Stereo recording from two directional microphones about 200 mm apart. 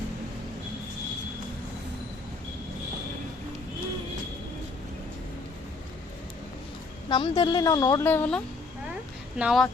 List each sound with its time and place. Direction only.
7.1 s speech: 25° left (ahead or behind); by 8.4 s 10° left (ahead or behind)
9.4 s speech: 5° right (ahead or behind)